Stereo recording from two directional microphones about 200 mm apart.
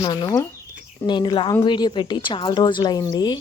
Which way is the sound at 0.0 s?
20° left (ahead or behind).